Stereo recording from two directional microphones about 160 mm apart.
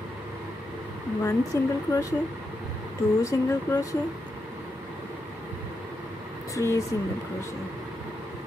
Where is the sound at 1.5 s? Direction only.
20° left (ahead or behind).